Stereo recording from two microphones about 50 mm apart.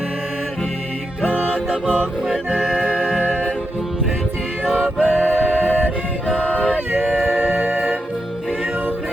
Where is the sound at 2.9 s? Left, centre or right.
Centre.